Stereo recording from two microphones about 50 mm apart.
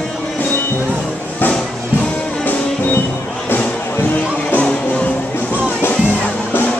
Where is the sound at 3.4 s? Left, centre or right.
Left.